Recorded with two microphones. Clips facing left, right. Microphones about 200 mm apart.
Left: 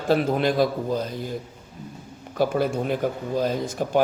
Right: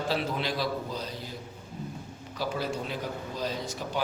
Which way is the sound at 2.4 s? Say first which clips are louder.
Left 9 dB; 55° left (ahead or behind).